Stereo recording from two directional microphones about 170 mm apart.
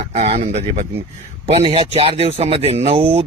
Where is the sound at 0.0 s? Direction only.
40° right (ahead or behind).